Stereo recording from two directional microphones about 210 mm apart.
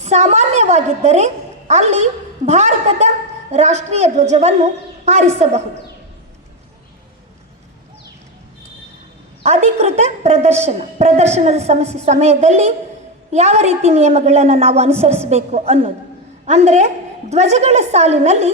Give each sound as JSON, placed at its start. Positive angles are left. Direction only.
{"t": 0.0, "sound": "a woman's voice", "side_deg": -30}
{"t": 9.4, "sound": "a woman's voice", "side_deg": -30}